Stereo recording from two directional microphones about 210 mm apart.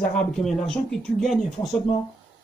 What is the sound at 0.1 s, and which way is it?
Speech, 5° left (ahead or behind).